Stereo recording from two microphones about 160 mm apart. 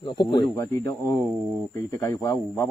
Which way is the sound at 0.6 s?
15° left (ahead or behind).